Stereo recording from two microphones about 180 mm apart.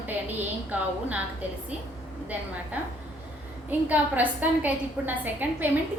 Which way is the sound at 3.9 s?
10° right (ahead or behind).